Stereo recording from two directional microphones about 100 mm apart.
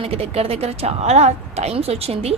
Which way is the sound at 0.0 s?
75° right (ahead or behind).